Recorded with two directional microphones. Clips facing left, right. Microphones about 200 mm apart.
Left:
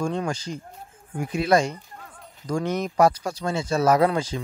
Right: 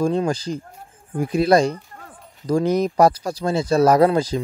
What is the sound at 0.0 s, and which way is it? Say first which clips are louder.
Speech: right 6 dB; 35° right (ahead or behind).